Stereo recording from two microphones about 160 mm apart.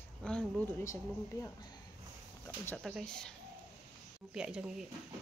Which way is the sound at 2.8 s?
Centre (ahead or behind).